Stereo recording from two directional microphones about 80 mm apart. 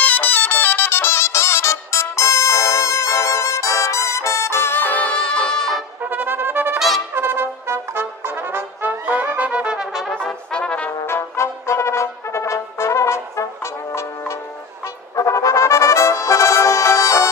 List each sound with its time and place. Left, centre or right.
0.0 s music: centre
6.0 s music: right
6.7 s brass instrument: centre
7.1 s brass instrument: right; by 10.2 s centre
10.2 s brass instrument: centre
11.0 s brass instrument: left
15.1 s music: left